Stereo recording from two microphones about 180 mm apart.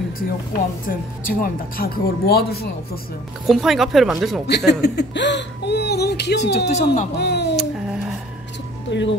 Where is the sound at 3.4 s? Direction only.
Centre (ahead or behind).